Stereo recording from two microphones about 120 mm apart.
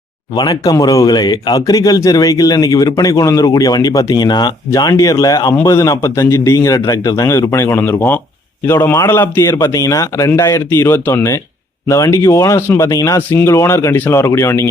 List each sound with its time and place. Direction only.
0.3 s a man's voice: 30° left (ahead or behind)